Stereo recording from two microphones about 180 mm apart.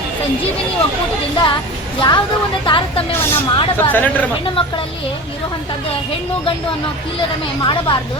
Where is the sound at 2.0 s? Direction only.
25° left (ahead or behind).